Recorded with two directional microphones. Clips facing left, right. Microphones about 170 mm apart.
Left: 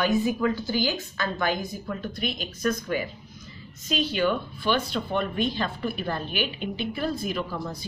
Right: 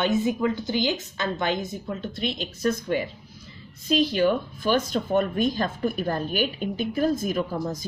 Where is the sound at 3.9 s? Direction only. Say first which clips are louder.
Right 4 dB; 35° right (ahead or behind).